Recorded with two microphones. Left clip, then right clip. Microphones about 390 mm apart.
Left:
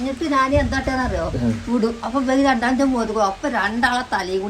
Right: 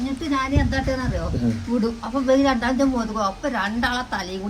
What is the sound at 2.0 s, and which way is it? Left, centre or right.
A woman's voice, centre.